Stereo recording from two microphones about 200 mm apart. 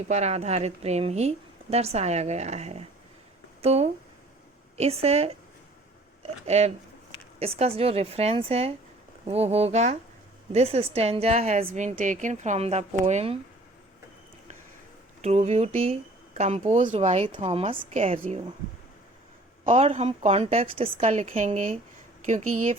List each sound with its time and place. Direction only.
0.1 s a woman's voice: 35° right (ahead or behind)
15.2 s a woman's voice: 35° right (ahead or behind)
18.0 s a woman's voice: 40° right (ahead or behind)
19.6 s a woman's voice: 30° right (ahead or behind)